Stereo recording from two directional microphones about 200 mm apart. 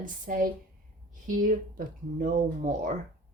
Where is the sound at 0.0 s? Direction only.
45° right (ahead or behind).